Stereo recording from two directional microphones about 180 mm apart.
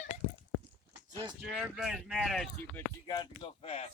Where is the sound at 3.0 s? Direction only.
25° left (ahead or behind).